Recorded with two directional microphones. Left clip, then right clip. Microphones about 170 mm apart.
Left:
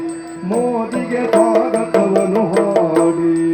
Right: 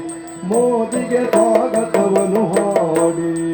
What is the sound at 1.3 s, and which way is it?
Music, 20° right (ahead or behind).